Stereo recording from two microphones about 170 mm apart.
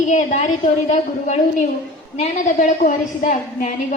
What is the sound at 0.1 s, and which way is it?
A woman's voice, 45° left (ahead or behind).